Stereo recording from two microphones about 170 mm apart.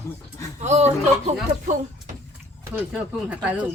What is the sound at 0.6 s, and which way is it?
Speech, 40° right (ahead or behind).